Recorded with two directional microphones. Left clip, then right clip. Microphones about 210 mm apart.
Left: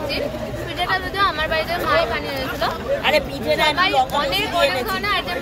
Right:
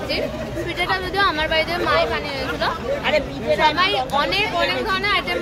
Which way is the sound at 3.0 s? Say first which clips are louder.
Left 2 dB; 50° left (ahead or behind).